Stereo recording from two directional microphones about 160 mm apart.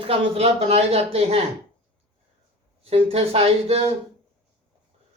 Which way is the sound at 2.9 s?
40° right (ahead or behind).